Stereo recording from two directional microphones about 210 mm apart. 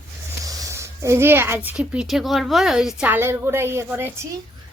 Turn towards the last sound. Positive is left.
turn(degrees=-10)  # may be behind; listen again after turning